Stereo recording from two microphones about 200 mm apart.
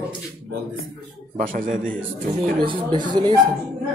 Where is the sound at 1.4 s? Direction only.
40° right (ahead or behind).